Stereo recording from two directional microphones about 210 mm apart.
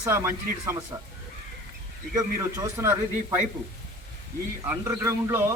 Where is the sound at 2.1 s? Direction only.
15° right (ahead or behind).